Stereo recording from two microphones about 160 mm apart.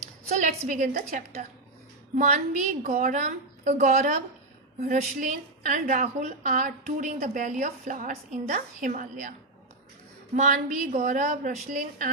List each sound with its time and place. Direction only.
0.3 s a woman's voice: 45° right (ahead or behind)
10.3 s a woman's voice: 50° right (ahead or behind)